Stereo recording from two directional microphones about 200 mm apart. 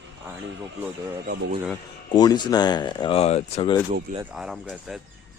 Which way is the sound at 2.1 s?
20° left (ahead or behind).